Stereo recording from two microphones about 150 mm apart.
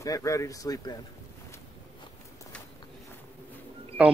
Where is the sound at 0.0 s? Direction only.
20° left (ahead or behind).